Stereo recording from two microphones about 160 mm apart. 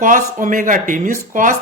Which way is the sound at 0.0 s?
55° right (ahead or behind).